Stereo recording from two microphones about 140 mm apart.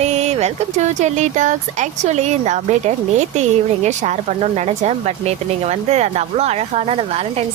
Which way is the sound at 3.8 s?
55° right (ahead or behind).